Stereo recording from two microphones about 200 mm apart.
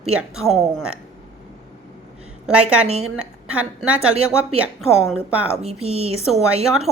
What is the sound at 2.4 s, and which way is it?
A woman's voice, 5° right (ahead or behind).